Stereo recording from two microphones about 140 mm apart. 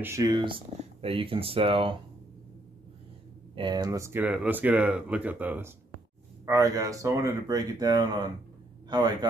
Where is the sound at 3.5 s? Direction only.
35° right (ahead or behind); by 5.7 s 15° right (ahead or behind).